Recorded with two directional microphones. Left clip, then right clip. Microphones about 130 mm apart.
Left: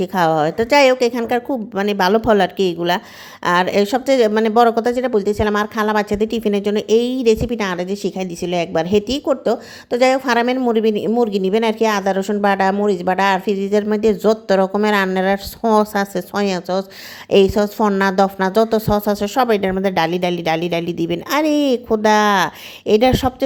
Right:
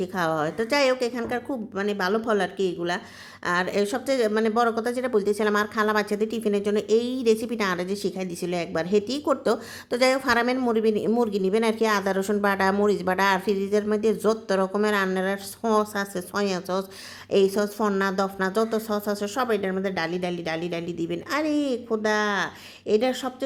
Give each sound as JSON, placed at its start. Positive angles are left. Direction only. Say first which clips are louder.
{"t": 0.0, "sound": "speech", "louder": "left 9 dB", "side_deg": 45}
{"t": 9.2, "sound": "speech", "louder": "left 6 dB", "side_deg": 20}